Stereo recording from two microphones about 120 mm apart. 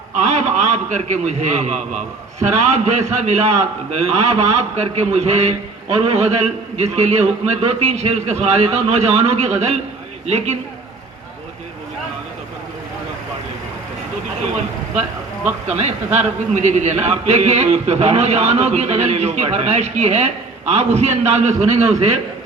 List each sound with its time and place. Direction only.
0.2 s a man's voice: 75° right (ahead or behind)
15.6 s a man's voice: 65° right (ahead or behind)